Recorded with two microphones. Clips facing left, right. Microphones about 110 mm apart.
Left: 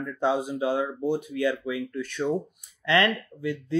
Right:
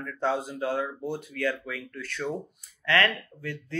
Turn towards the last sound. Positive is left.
turn(degrees=15)  # may be behind; listen again after turning